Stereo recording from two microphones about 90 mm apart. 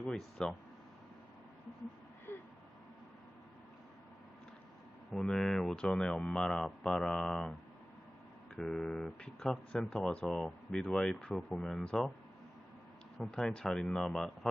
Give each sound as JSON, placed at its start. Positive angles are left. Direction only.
{"t": 0.0, "sound": "speech", "side_deg": 10}
{"t": 2.3, "sound": "a sound", "side_deg": 25}
{"t": 5.1, "sound": "speech", "side_deg": 10}
{"t": 8.5, "sound": "speech", "side_deg": 5}
{"t": 13.1, "sound": "speech", "side_deg": 5}